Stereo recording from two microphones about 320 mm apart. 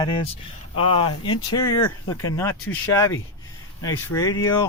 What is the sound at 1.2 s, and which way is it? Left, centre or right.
Speech, left.